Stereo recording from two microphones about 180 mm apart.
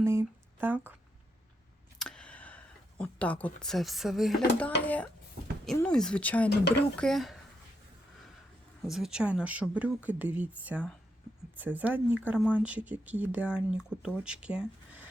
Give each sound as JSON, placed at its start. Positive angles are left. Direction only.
{"t": 0.0, "sound": "a sound", "side_deg": -15}
{"t": 2.0, "sound": "a sound", "side_deg": 5}
{"t": 3.0, "sound": "speech", "side_deg": 5}
{"t": 5.7, "sound": "speech", "side_deg": 5}
{"t": 6.5, "sound": "speech", "side_deg": 70}
{"t": 6.9, "sound": "speech", "side_deg": 5}
{"t": 8.8, "sound": "speech", "side_deg": 0}